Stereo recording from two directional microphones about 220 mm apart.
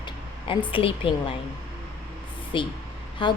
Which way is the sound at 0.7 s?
25° left (ahead or behind).